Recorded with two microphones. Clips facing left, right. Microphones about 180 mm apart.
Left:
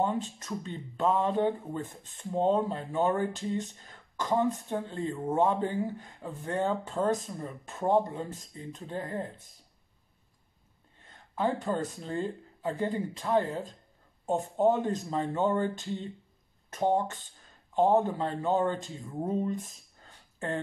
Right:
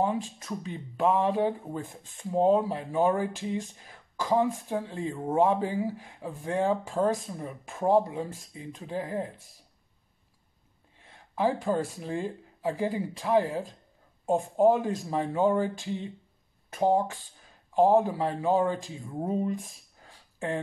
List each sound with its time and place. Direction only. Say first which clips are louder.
0.7 s speech: right 3 dB; 10° right (ahead or behind)
11.1 s speech: right 3 dB; 10° right (ahead or behind)
16.7 s speech: right 3 dB; 10° right (ahead or behind)
20.1 s a sound: right 2 dB; 10° right (ahead or behind)